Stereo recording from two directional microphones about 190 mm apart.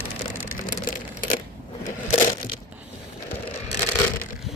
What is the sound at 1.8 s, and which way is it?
Crushing, 40° left (ahead or behind).